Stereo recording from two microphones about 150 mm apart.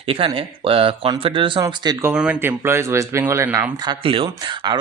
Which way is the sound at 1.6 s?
25° right (ahead or behind).